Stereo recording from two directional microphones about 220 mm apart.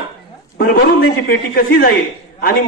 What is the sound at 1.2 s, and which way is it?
A man's voice, 45° left (ahead or behind).